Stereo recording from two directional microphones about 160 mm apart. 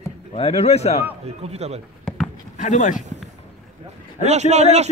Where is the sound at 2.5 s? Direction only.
50° left (ahead or behind).